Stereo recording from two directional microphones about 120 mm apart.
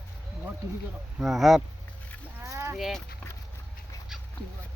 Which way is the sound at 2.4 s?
25° right (ahead or behind).